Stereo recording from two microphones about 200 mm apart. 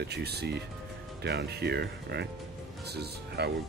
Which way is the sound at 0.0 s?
55° right (ahead or behind).